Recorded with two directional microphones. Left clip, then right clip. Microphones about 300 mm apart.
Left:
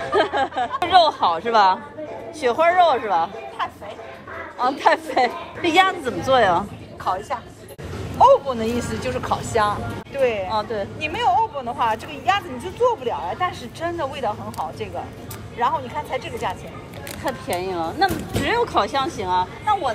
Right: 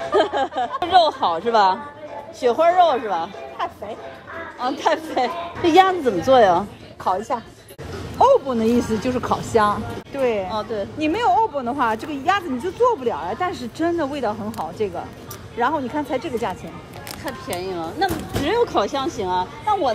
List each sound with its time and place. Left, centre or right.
0.1 s speech: centre
4.6 s speech: centre
7.1 s speech: right
10.5 s speech: centre
11.0 s a woman's voice: right
17.2 s speech: centre